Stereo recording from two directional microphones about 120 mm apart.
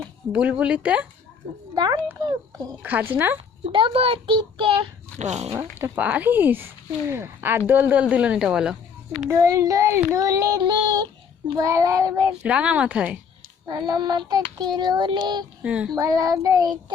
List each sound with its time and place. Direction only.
0.6 s speech: 10° right (ahead or behind)
1.7 s a child's voice: 35° right (ahead or behind)
2.8 s speech: 15° right (ahead or behind)
3.6 s a child's voice: 45° right (ahead or behind)
5.2 s speech: 70° right (ahead or behind)
5.5 s speech: 15° right (ahead or behind)
9.3 s speech: 25° right (ahead or behind)
12.4 s speech: 10° right (ahead or behind)
13.7 s speech: 35° right (ahead or behind)
15.6 s speech: 10° right (ahead or behind)
16.0 s speech: 30° right (ahead or behind)